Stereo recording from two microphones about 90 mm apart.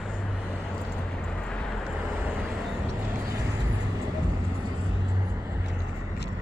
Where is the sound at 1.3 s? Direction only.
10° left (ahead or behind).